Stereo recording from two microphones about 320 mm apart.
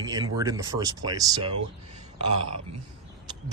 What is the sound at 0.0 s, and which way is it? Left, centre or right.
Speech, centre.